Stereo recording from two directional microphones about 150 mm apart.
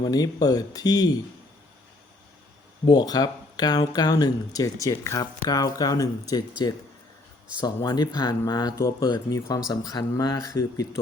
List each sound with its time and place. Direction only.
0.0 s speech: 25° left (ahead or behind)
2.8 s speech: 25° left (ahead or behind)
7.6 s speech: 25° left (ahead or behind)